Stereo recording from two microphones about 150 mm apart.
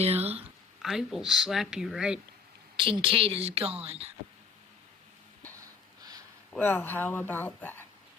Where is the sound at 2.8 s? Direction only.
35° right (ahead or behind).